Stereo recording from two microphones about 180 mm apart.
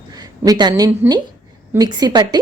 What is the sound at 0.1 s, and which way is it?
A woman's voice, 20° right (ahead or behind).